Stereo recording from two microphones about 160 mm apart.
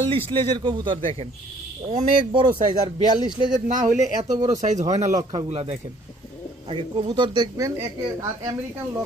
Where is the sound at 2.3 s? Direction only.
30° right (ahead or behind).